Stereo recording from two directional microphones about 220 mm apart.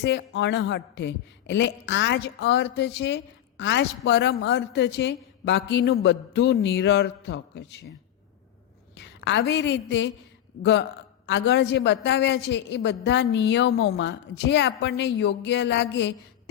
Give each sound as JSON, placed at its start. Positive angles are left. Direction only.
{"t": 0.0, "sound": "a man's voice", "side_deg": 55}
{"t": 9.0, "sound": "a woman's voice", "side_deg": 50}